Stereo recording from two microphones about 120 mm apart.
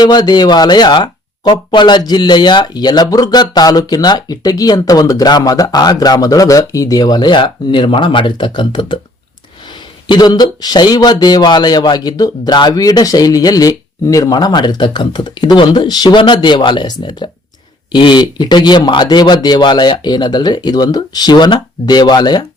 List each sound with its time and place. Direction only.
0.0 s speech: 35° left (ahead or behind)
10.1 s speech: 35° left (ahead or behind)